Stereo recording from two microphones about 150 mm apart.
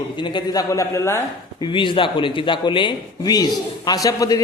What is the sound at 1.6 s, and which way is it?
Speech, 35° left (ahead or behind).